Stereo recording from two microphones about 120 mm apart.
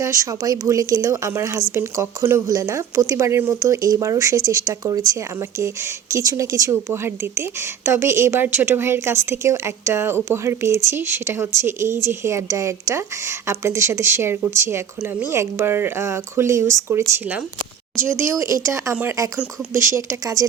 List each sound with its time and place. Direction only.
0.0 s speech: 25° right (ahead or behind)
18.2 s speech: 25° right (ahead or behind)